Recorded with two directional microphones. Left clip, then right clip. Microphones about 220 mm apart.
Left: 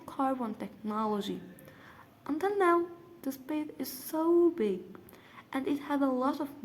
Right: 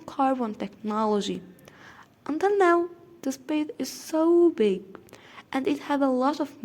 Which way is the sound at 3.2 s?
35° right (ahead or behind).